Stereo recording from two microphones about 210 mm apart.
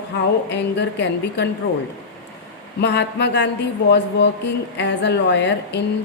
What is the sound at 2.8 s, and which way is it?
Speech, 55° left (ahead or behind).